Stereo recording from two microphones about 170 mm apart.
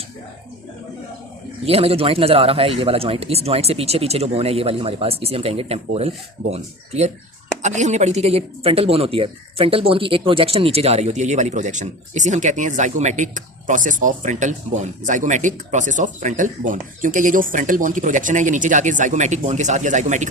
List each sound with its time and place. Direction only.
1.6 s speech: 35° right (ahead or behind)